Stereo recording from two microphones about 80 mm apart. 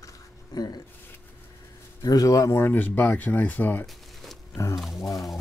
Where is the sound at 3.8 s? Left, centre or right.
Centre.